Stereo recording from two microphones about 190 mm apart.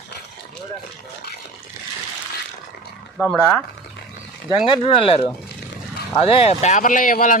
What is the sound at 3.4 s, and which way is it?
Speech, 10° left (ahead or behind).